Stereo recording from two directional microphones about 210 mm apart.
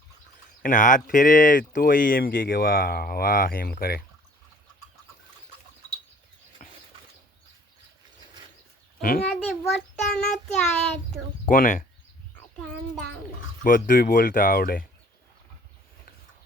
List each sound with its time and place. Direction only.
0.6 s speech: 40° left (ahead or behind)
6.6 s a sound: 35° left (ahead or behind)
9.0 s a child's voice: 45° left (ahead or behind)
9.3 s child singing: centre (ahead or behind)
11.4 s speech: 40° left (ahead or behind)
13.7 s speech: 40° left (ahead or behind)